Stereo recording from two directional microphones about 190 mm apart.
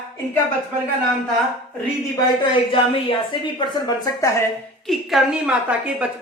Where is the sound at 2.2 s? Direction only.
25° left (ahead or behind).